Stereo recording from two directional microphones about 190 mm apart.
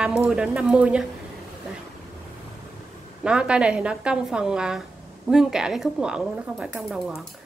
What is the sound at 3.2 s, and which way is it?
A woman's voice, 5° right (ahead or behind).